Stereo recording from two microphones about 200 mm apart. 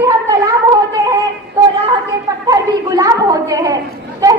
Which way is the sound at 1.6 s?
10° right (ahead or behind).